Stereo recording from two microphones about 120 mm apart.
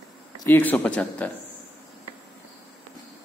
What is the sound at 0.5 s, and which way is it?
Speech, 15° left (ahead or behind).